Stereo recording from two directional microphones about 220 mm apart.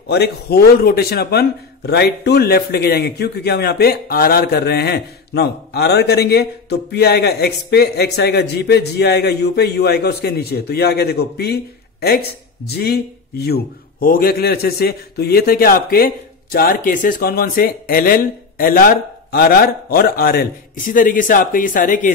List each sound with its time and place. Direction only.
0.1 s speech: 45° left (ahead or behind)